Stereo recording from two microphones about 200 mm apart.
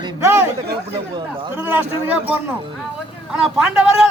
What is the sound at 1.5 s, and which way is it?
Speech, 10° right (ahead or behind).